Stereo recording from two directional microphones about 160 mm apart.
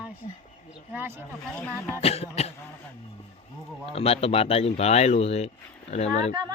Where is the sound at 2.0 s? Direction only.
40° left (ahead or behind).